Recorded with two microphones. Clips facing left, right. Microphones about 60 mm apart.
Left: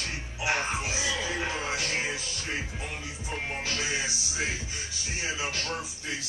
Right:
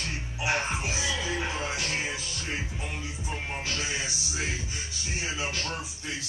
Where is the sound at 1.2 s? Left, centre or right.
Left.